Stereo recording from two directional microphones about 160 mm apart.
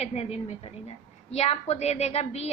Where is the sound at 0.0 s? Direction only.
40° left (ahead or behind).